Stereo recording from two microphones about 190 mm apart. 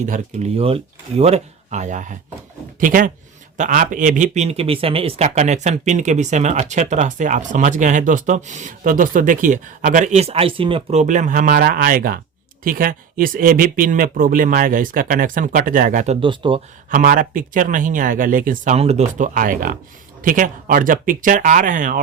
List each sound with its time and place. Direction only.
0.0 s speech: 40° right (ahead or behind)
16.2 s speech: 25° right (ahead or behind)
16.9 s speech: 45° right (ahead or behind)